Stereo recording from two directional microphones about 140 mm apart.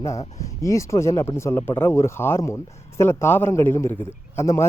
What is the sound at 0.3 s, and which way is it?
A man's voice, 20° left (ahead or behind).